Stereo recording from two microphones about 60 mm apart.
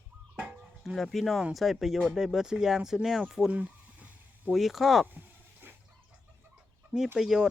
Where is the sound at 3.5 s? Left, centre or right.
Right.